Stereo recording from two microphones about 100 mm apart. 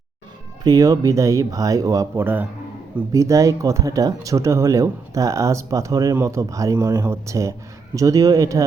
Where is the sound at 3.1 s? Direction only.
30° right (ahead or behind).